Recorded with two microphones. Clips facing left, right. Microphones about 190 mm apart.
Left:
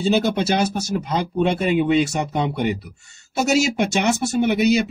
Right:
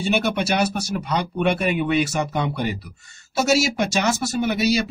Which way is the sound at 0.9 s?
25° left (ahead or behind).